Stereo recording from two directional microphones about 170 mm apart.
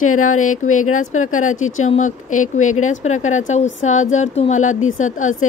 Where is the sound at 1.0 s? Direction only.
50° left (ahead or behind).